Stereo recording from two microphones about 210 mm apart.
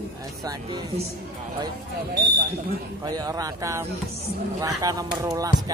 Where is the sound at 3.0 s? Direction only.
15° right (ahead or behind).